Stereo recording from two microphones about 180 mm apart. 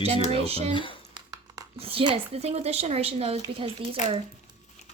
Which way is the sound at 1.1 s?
20° right (ahead or behind).